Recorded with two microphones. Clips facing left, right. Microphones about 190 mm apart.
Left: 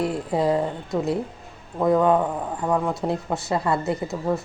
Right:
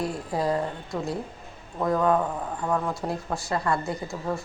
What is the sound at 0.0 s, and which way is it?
A woman's voice, 25° left (ahead or behind).